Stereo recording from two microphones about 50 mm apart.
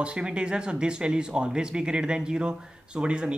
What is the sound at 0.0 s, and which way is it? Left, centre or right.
Speech, right.